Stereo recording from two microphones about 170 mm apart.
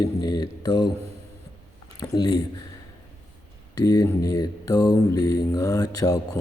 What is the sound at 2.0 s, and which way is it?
Mantra, 20° left (ahead or behind).